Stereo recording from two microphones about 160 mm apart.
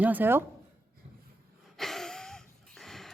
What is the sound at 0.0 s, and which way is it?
Speech, 10° right (ahead or behind).